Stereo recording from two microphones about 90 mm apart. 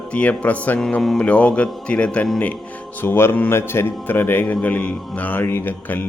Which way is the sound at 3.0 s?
25° left (ahead or behind).